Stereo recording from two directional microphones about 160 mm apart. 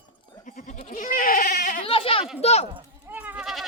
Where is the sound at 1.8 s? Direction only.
35° left (ahead or behind).